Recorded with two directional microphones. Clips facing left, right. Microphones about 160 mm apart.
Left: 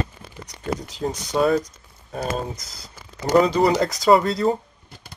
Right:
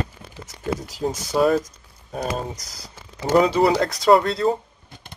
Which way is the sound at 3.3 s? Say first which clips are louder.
Even; centre (ahead or behind).